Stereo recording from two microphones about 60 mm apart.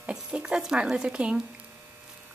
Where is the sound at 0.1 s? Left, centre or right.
Centre.